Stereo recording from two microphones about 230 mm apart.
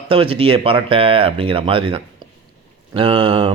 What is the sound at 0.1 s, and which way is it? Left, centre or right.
Speech, right.